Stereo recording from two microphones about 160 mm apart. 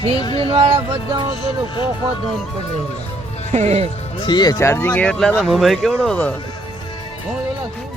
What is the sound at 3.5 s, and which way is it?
Speech, 45° right (ahead or behind).